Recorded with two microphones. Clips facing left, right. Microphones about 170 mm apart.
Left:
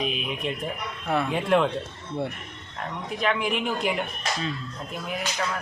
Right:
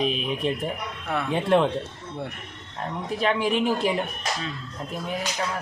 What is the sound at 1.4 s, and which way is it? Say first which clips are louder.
Speech: right 3 dB; 30° right (ahead or behind).